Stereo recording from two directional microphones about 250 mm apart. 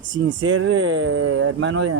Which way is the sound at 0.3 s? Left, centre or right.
Right.